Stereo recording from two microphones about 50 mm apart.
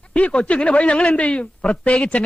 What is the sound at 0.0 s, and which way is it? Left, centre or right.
Speech, left.